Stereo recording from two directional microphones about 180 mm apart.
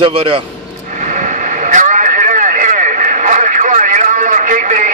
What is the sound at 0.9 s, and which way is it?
Vehicle, 45° right (ahead or behind).